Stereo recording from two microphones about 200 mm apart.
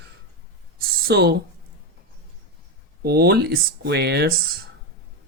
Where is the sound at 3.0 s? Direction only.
50° right (ahead or behind).